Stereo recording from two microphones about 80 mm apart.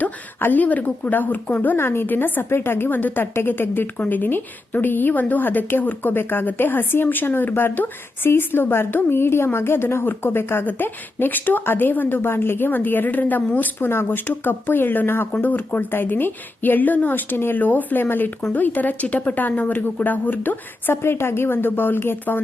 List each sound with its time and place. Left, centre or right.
0.0 s speech: left